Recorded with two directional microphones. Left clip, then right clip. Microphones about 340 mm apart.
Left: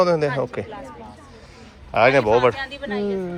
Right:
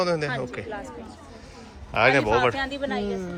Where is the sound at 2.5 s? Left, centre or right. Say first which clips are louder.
Even; right.